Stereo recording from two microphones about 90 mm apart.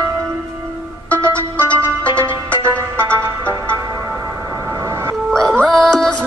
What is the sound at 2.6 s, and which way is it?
Music, 30° right (ahead or behind).